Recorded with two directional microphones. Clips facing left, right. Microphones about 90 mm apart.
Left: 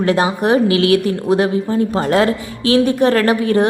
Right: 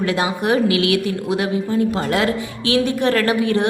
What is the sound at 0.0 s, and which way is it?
A woman's voice, 35° left (ahead or behind).